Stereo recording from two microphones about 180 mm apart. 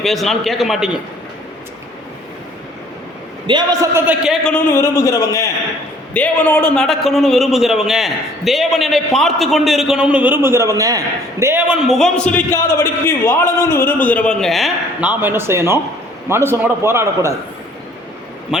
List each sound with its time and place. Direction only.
0.0 s a man's voice: centre (ahead or behind)
3.4 s a man's voice: 25° right (ahead or behind); by 4.5 s 5° right (ahead or behind)
4.5 s a man's voice: 15° left (ahead or behind); by 11.8 s 15° right (ahead or behind)
11.9 s a man's voice: centre (ahead or behind); by 17.3 s 15° right (ahead or behind)
18.5 s a man's voice: 5° right (ahead or behind)